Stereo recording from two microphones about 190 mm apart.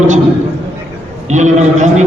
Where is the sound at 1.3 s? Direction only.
40° right (ahead or behind).